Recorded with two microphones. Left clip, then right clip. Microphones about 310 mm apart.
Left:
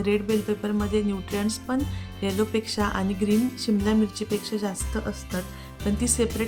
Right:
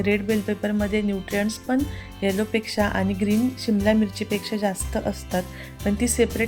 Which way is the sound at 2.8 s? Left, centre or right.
Left.